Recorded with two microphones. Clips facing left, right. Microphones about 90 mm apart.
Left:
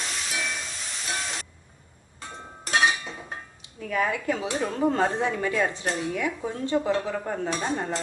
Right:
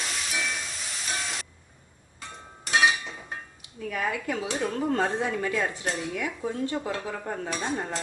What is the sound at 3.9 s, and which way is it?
Speech, 30° left (ahead or behind).